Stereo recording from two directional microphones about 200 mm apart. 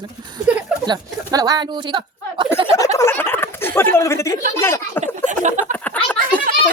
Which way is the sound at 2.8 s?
15° left (ahead or behind).